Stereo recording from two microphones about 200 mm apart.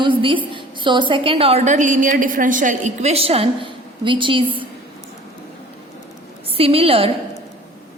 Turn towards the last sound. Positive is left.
turn(degrees=-30)  # may be behind; listen again after turning